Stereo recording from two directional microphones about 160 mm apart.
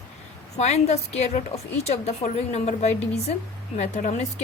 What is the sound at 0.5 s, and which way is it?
A woman's voice, 40° left (ahead or behind).